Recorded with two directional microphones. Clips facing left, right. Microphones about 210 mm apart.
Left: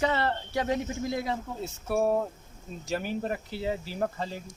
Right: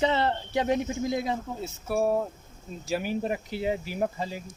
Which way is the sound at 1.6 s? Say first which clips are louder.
Even; centre (ahead or behind).